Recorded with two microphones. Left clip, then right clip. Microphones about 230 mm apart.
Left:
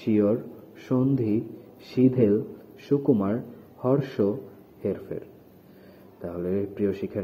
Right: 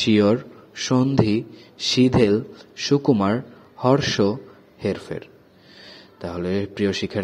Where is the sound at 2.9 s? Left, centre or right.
Right.